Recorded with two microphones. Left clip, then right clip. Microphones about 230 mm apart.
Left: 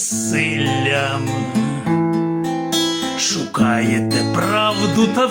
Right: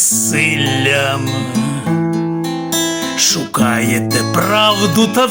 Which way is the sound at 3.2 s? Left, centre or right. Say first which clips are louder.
Right 6 dB; right.